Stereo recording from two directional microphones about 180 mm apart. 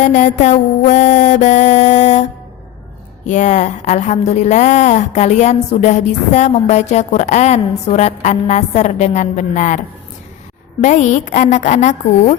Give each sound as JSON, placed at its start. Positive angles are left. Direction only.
{"t": 0.0, "sound": "a sound", "side_deg": 45}
{"t": 0.4, "sound": "a woman's voice", "side_deg": 40}
{"t": 3.2, "sound": "a woman's voice", "side_deg": 40}
{"t": 10.8, "sound": "a woman's voice", "side_deg": 40}